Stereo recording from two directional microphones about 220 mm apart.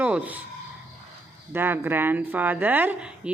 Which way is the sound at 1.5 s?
10° right (ahead or behind).